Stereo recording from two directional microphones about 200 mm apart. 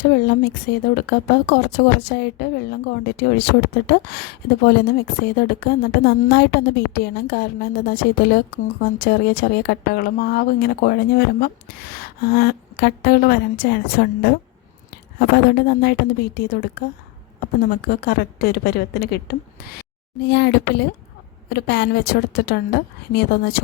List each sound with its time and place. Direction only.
0.0 s speech: 50° left (ahead or behind)